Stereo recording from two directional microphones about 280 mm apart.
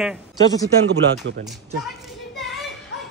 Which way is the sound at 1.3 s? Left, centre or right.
Right.